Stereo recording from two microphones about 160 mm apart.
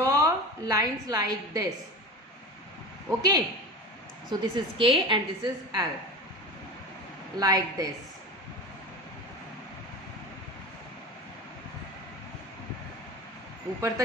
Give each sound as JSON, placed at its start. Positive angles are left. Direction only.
{"t": 0.0, "sound": "a woman's voice", "side_deg": -20}
{"t": 3.1, "sound": "a woman's voice", "side_deg": -25}
{"t": 7.3, "sound": "a woman's voice", "side_deg": -25}
{"t": 13.7, "sound": "speech", "side_deg": -15}